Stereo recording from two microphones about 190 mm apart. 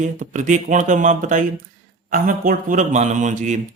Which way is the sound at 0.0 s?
40° right (ahead or behind).